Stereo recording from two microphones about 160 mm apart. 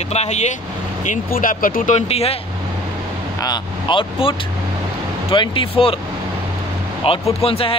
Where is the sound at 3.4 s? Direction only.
30° left (ahead or behind).